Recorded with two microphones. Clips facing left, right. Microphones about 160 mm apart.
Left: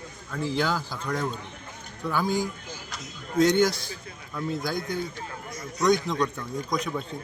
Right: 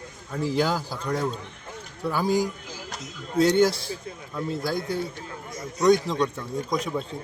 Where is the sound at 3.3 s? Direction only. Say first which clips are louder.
Right 1 dB; 30° right (ahead or behind).